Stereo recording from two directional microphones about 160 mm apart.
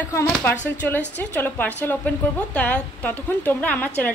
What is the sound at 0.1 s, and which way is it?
Speech, 15° left (ahead or behind).